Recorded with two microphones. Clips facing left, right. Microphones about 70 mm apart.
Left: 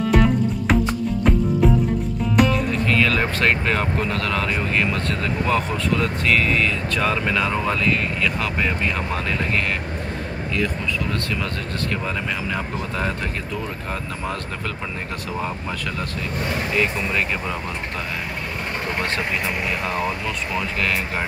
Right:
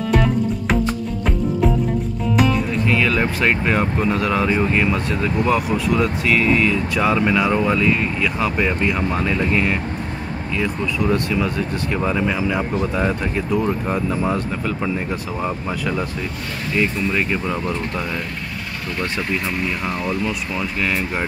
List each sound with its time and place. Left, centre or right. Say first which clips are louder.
0.1 s music: right 1 dB; centre
2.3 s speech: even; centre